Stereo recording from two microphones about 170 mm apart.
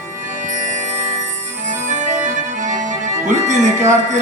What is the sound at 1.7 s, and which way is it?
Music, 45° right (ahead or behind).